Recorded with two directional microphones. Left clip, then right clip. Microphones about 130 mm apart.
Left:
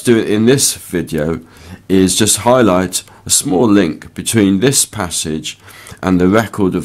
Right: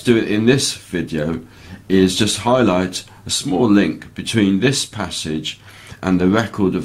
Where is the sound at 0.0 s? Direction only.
35° left (ahead or behind).